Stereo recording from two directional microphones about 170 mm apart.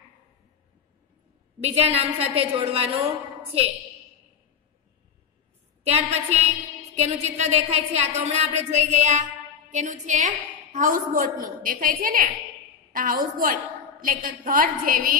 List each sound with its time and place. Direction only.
1.6 s a woman's voice: 40° right (ahead or behind)
5.9 s a woman's voice: 40° right (ahead or behind); by 15.1 s 55° right (ahead or behind)